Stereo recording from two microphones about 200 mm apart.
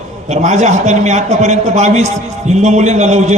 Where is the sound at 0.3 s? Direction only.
35° right (ahead or behind).